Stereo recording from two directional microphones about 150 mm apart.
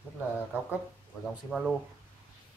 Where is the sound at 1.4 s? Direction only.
Centre (ahead or behind).